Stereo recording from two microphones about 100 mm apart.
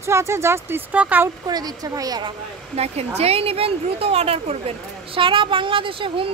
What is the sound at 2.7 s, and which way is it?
Speech, 90° right.